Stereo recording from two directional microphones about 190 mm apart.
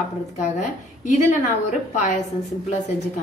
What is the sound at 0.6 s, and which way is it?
Speech, 40° left (ahead or behind).